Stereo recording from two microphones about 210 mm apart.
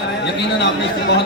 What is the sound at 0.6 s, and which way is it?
Speech, 55° left (ahead or behind).